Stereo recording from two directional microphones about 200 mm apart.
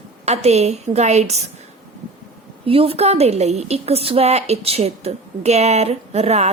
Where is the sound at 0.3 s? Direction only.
35° right (ahead or behind).